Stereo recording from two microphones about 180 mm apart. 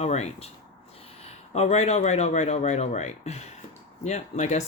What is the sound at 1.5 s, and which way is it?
Speech, 35° left (ahead or behind).